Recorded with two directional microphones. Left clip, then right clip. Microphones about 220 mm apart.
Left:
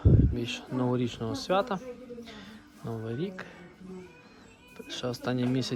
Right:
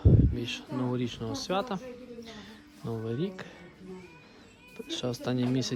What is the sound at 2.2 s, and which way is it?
Music, 15° right (ahead or behind).